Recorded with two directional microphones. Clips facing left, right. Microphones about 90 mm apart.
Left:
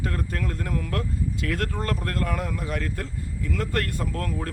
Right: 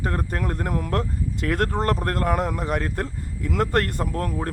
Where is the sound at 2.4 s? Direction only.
30° right (ahead or behind).